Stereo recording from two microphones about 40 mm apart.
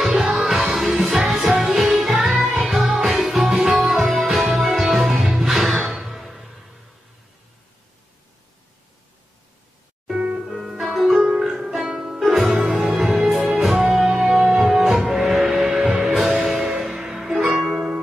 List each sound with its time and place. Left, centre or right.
0.0 s music: centre
10.2 s music: right
10.5 s music: centre
14.2 s music: centre